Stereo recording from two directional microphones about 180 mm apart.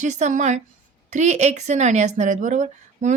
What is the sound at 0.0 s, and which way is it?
A woman's voice, 40° right (ahead or behind).